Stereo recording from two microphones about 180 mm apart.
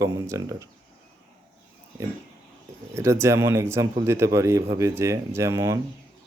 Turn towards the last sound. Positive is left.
turn(degrees=-15)  # may be behind; listen again after turning